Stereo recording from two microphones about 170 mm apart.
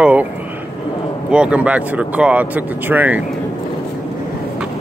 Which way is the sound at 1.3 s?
5° right (ahead or behind).